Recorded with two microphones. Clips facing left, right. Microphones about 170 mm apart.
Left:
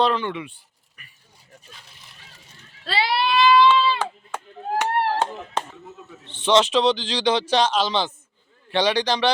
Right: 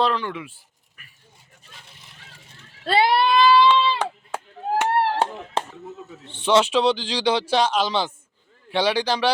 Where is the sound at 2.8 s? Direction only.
50° right (ahead or behind); by 3.6 s 35° right (ahead or behind).